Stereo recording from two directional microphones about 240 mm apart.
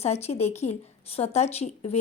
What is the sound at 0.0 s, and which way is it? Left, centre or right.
A woman's voice, left.